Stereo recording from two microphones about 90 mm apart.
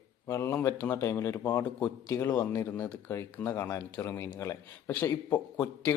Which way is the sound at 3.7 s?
35° left (ahead or behind).